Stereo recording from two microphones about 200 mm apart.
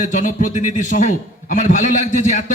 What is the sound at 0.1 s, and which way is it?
A man's voice, 40° left (ahead or behind).